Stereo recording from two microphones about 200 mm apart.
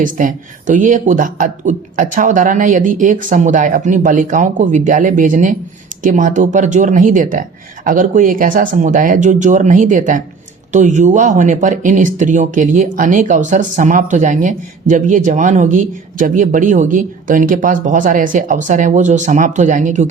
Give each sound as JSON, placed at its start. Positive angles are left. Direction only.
{"t": 0.0, "sound": "speech", "side_deg": -40}